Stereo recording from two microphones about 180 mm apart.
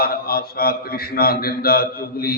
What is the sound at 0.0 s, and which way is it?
A man's voice, 55° left (ahead or behind).